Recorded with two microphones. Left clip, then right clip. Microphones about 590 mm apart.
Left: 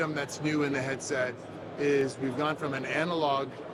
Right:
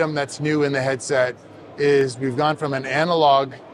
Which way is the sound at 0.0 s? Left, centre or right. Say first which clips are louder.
Right 9 dB; right.